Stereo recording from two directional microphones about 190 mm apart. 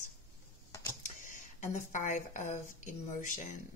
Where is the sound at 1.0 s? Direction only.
40° left (ahead or behind).